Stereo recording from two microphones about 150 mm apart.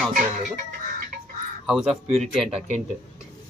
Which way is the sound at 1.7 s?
Centre (ahead or behind).